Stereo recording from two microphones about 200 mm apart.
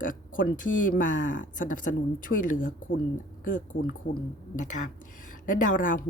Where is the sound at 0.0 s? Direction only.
40° left (ahead or behind).